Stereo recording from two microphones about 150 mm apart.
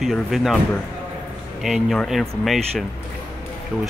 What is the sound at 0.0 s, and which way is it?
Speech, centre (ahead or behind).